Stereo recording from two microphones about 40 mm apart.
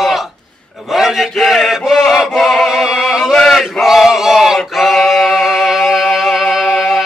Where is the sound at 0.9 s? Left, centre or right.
Centre.